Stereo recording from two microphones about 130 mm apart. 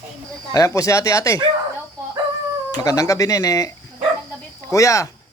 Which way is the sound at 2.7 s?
25° left (ahead or behind).